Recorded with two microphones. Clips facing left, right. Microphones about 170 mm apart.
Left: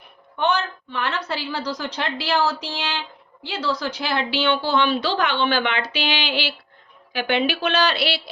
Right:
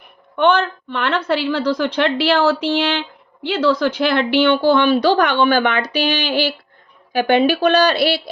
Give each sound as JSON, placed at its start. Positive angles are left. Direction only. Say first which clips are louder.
{"t": 0.3, "sound": "a woman's voice", "louder": "right 7 dB", "side_deg": -60}